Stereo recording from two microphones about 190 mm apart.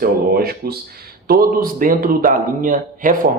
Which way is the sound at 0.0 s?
55° right (ahead or behind).